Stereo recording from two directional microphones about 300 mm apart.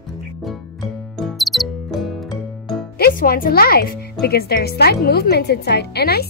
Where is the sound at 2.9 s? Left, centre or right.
Left.